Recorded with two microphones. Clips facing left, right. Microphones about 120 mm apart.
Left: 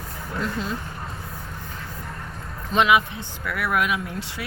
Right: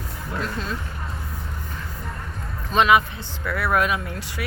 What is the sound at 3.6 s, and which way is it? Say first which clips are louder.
Speech: right 2 dB; 35° right (ahead or behind).